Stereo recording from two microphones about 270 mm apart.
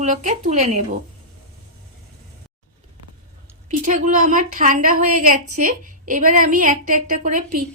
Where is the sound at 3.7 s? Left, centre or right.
Right.